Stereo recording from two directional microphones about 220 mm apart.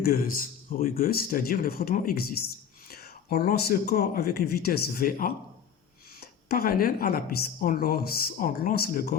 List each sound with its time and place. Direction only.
0.0 s speech: 40° left (ahead or behind)